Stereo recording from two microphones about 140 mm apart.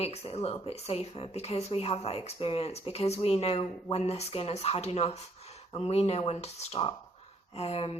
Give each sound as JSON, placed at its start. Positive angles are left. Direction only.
{"t": 0.0, "sound": "speech", "side_deg": 50}